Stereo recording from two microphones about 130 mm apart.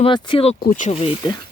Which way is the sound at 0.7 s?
80° left.